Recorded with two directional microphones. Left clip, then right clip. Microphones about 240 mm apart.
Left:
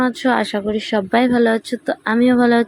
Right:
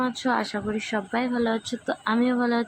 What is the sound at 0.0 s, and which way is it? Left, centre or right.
Speech, centre.